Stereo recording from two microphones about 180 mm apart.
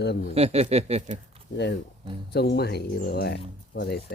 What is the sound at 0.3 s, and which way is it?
Speech, 35° right (ahead or behind).